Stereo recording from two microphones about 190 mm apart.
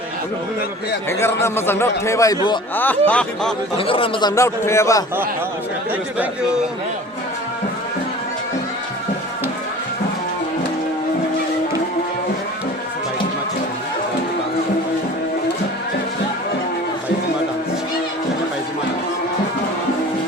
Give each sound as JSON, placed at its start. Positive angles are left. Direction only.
{"t": 1.2, "sound": "a man's voice", "side_deg": 15}
{"t": 2.7, "sound": "a man's voice", "side_deg": 10}
{"t": 3.8, "sound": "speech", "side_deg": 30}